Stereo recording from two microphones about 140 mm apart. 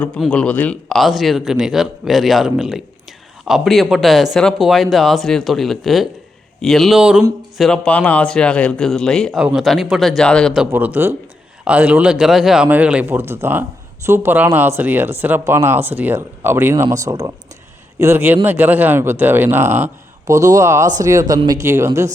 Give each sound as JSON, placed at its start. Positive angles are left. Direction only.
{"t": 0.3, "sound": "speech", "side_deg": 10}
{"t": 7.6, "sound": "speech", "side_deg": 10}
{"t": 10.7, "sound": "a man's voice", "side_deg": -10}